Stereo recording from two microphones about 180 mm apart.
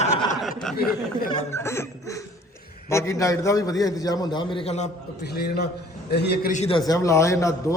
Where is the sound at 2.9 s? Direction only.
15° left (ahead or behind); by 4.8 s 30° left (ahead or behind).